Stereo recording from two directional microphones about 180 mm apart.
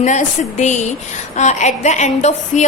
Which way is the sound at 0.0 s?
40° left (ahead or behind).